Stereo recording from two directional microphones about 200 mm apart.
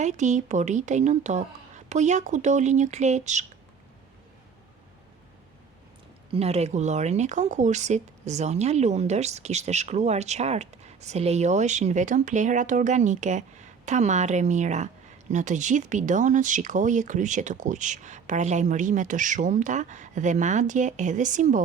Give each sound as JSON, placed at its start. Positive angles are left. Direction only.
{"t": 0.0, "sound": "speech", "side_deg": -35}
{"t": 6.3, "sound": "speech", "side_deg": -30}